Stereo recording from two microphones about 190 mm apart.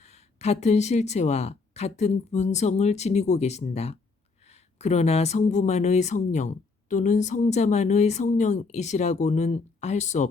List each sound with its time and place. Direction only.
0.0 s speech: 35° left (ahead or behind)